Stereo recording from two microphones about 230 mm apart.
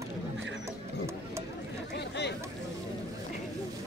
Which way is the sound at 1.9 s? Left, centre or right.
Left.